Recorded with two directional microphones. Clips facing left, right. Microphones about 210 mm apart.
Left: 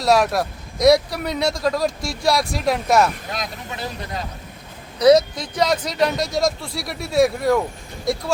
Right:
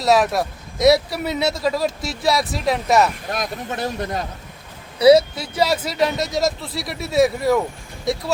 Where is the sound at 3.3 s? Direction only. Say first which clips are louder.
Right 4 dB; 50° right (ahead or behind).